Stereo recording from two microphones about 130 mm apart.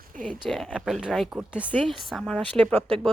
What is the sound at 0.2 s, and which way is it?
Speech, 5° left (ahead or behind).